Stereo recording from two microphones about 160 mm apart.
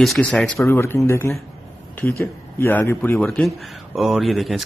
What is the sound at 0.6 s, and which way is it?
Speech, 15° left (ahead or behind).